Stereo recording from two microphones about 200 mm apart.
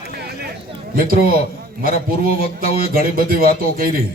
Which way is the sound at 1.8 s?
45° right (ahead or behind).